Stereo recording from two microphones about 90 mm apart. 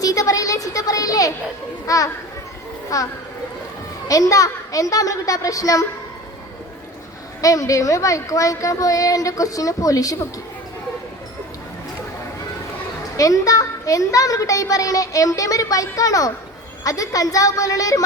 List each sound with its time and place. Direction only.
0.0 s a child's voice: 40° left (ahead or behind)
4.1 s a child's voice: 40° left (ahead or behind)
7.4 s a child's voice: 40° left (ahead or behind)
13.1 s a child's voice: 40° left (ahead or behind)